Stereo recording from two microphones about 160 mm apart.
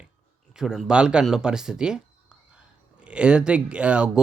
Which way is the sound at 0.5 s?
Centre (ahead or behind).